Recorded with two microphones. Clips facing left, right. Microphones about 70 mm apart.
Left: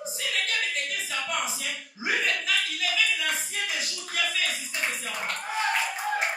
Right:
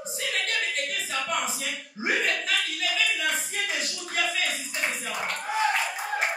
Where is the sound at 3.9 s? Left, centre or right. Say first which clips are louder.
Right 2 dB; right.